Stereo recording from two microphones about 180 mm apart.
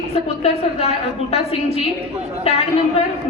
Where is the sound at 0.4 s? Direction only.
35° left (ahead or behind).